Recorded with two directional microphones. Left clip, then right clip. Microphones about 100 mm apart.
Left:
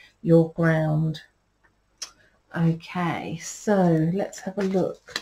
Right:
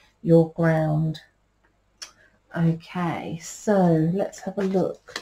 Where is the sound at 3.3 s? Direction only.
25° left (ahead or behind).